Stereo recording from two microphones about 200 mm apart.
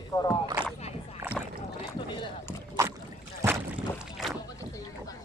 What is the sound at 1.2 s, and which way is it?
Rowboat, 10° right (ahead or behind).